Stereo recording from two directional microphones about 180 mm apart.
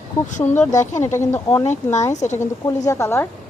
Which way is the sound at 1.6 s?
40° left (ahead or behind).